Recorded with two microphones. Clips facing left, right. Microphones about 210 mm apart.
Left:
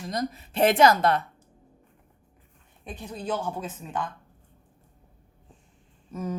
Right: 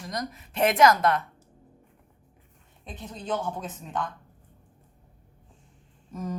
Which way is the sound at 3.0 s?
10° left (ahead or behind).